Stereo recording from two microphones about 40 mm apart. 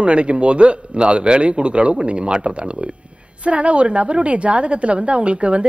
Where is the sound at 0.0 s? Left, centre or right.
Right.